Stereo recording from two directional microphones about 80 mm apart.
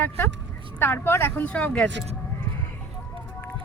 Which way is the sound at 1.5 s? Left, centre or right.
Centre.